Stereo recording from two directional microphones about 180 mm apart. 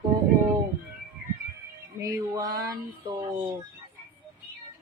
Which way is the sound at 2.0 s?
20° right (ahead or behind).